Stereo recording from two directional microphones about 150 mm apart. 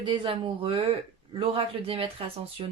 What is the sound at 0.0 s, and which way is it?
Speech, 30° right (ahead or behind).